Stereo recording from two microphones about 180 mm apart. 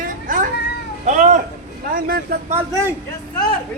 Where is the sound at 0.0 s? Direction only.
45° right (ahead or behind).